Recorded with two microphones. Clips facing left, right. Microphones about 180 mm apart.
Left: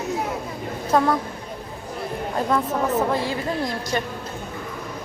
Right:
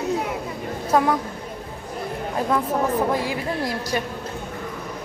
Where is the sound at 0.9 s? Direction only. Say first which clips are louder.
Even; 10° right (ahead or behind).